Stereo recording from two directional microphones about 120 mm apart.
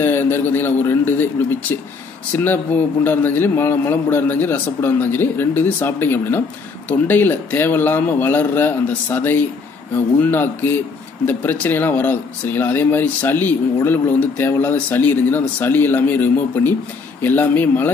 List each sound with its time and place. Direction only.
0.0 s speech: 15° left (ahead or behind)